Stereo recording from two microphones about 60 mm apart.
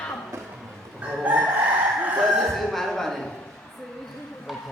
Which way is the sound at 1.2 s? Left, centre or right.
Right.